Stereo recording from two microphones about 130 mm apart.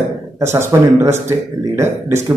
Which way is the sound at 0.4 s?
20° right (ahead or behind).